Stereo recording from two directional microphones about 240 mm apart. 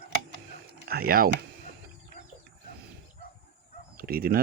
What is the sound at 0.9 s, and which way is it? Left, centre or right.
Speech, right.